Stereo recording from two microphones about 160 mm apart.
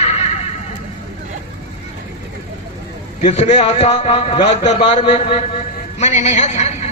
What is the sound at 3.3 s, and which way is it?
A man's voice, 45° left (ahead or behind).